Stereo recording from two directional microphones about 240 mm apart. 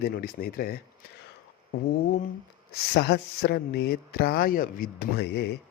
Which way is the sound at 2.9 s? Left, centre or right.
Left.